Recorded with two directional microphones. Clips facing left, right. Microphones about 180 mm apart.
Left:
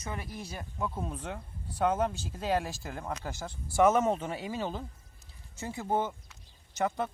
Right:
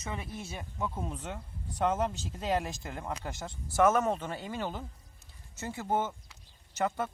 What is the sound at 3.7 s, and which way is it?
Speech, 20° left (ahead or behind).